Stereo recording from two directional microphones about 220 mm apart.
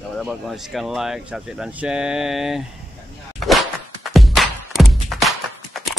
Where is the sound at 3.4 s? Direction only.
Centre (ahead or behind).